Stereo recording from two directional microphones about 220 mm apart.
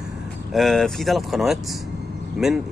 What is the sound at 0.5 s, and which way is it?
Speech, centre (ahead or behind).